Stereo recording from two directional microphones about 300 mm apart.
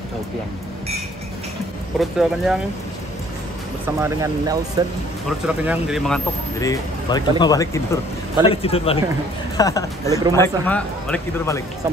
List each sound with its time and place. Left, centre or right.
2.0 s speech: centre
3.8 s speech: centre
5.6 s speech: centre
10.0 s speech: centre
10.3 s speech: centre